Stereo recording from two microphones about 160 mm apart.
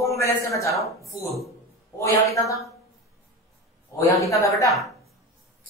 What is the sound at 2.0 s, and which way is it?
Speech, 20° left (ahead or behind).